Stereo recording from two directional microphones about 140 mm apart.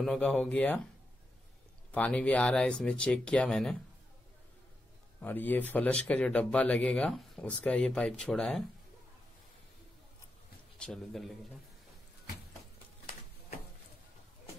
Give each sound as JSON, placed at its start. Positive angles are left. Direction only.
{"t": 0.0, "sound": "speech", "side_deg": 5}
{"t": 1.9, "sound": "speech", "side_deg": 10}
{"t": 5.2, "sound": "speech", "side_deg": 15}
{"t": 10.8, "sound": "a man's voice", "side_deg": 5}